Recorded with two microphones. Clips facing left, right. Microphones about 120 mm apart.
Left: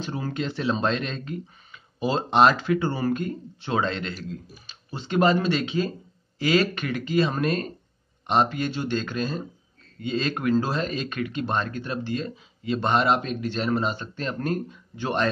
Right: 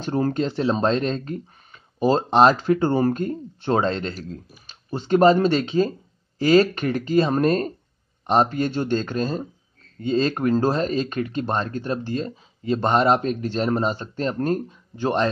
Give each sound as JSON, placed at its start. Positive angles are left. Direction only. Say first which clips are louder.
{"t": 0.0, "sound": "speech", "louder": "right 7 dB", "side_deg": -45}